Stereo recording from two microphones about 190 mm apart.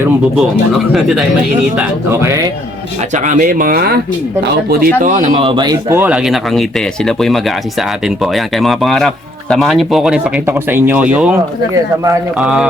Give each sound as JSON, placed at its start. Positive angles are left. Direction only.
{"t": 0.3, "sound": "speech", "side_deg": 0}
{"t": 3.1, "sound": "speech", "side_deg": -40}
{"t": 5.0, "sound": "speech", "side_deg": -40}